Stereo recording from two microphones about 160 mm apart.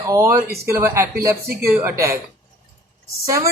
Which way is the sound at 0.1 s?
20° right (ahead or behind).